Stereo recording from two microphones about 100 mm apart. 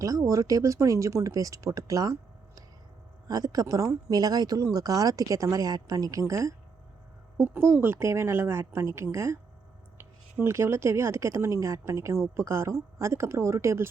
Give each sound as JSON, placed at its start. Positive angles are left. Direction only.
{"t": 0.0, "sound": "speech", "side_deg": -35}
{"t": 3.2, "sound": "speech", "side_deg": -40}